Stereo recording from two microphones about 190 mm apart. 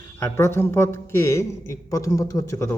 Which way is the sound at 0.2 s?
15° left (ahead or behind).